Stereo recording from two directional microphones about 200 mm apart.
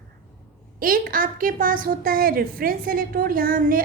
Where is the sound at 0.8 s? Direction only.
45° right (ahead or behind).